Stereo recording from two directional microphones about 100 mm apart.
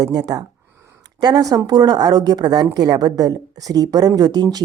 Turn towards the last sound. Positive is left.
turn(degrees=-45)  # may be behind; listen again after turning